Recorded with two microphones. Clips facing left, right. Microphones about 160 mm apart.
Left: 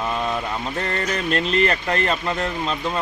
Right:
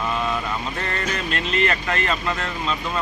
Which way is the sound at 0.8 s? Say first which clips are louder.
Left 2 dB; 35° left (ahead or behind).